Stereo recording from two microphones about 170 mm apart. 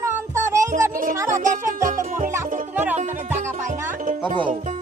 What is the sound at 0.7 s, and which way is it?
Speech, 55° right (ahead or behind).